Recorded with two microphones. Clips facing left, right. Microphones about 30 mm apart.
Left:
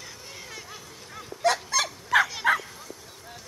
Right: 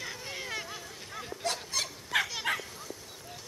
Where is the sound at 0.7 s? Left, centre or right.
Centre.